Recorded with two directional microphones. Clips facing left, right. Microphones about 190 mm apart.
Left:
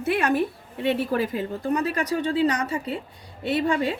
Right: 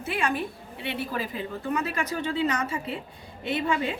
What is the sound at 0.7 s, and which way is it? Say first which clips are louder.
A woman's voice: left 8 dB; 50° left (ahead or behind).